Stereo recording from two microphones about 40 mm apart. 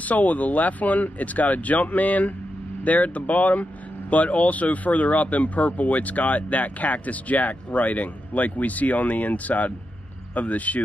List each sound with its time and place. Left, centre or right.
0.0 s speech: left